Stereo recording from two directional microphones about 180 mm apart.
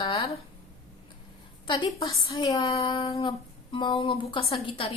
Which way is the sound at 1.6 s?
25° left (ahead or behind).